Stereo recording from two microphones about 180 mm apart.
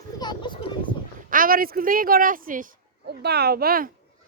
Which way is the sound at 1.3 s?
50° right (ahead or behind).